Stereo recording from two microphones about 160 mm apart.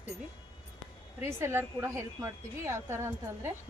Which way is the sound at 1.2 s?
15° right (ahead or behind).